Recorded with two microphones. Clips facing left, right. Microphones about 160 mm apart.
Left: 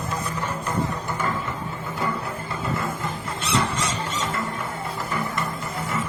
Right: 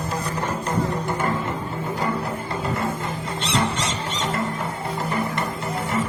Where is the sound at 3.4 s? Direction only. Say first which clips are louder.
Right 1 dB; 30° right (ahead or behind).